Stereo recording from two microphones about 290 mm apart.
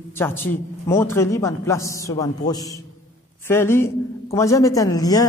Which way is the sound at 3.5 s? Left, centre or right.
Centre.